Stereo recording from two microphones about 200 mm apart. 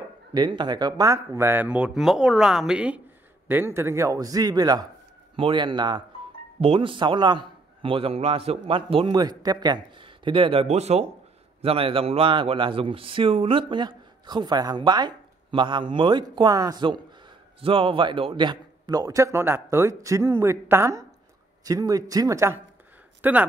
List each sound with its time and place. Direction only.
0.3 s a man's voice: 20° right (ahead or behind)